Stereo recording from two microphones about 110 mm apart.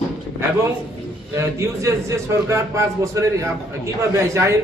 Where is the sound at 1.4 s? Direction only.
25° right (ahead or behind).